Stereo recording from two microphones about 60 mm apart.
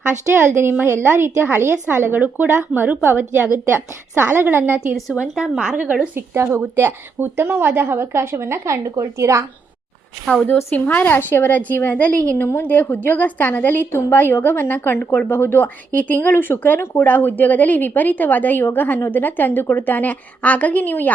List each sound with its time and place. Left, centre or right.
0.3 s a woman's voice: right
5.4 s a woman's voice: centre
6.1 s a woman's voice: right
10.8 s a woman's voice: left